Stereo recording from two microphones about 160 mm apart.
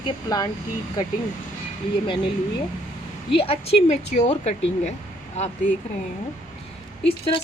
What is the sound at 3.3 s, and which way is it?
A woman's voice, 35° left (ahead or behind).